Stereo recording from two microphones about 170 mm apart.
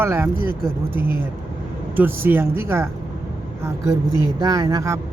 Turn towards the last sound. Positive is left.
turn(degrees=-20)  # may be behind; listen again after turning